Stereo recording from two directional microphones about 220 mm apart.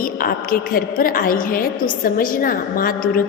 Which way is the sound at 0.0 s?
40° left (ahead or behind).